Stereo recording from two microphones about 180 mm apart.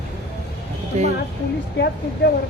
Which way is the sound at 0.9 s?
35° right (ahead or behind).